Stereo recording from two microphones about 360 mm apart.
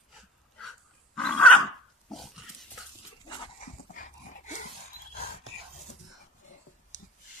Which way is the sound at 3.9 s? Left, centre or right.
Left.